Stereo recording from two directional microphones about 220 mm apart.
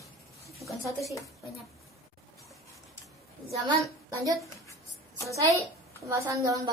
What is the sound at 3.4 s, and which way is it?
Speech, 20° right (ahead or behind).